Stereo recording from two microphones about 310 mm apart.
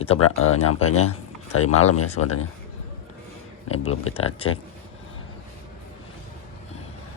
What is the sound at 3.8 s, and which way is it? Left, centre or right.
Speech, left.